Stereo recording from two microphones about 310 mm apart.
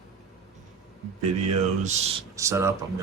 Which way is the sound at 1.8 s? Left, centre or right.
Right.